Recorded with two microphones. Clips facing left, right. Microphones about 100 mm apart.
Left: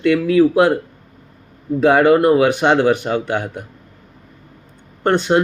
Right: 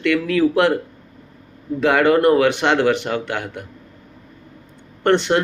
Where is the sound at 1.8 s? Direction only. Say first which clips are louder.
Left 3 dB; 20° left (ahead or behind).